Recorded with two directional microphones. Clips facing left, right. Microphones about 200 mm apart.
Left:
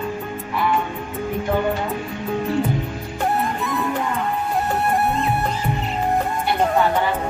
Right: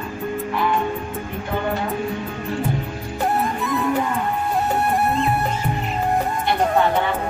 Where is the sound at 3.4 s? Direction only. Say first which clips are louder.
Right 1 dB; centre (ahead or behind).